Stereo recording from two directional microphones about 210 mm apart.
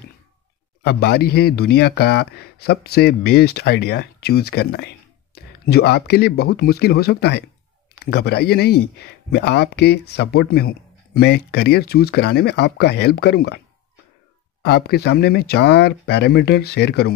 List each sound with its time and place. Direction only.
0.8 s speech: 50° left (ahead or behind)
14.6 s speech: 50° left (ahead or behind)